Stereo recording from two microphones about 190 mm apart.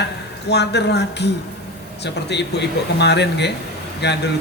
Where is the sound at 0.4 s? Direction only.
60° left (ahead or behind).